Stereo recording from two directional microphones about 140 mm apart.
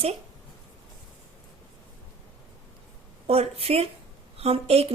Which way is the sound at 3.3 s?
45° right (ahead or behind).